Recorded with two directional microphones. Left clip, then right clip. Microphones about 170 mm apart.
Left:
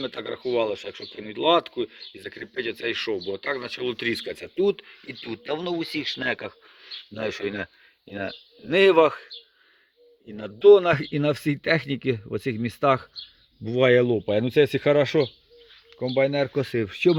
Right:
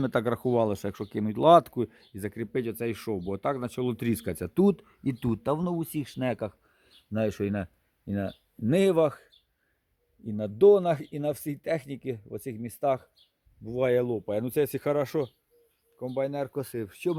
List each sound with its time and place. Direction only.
0.0 s speech: 40° right (ahead or behind)
5.3 s speech: 15° right (ahead or behind)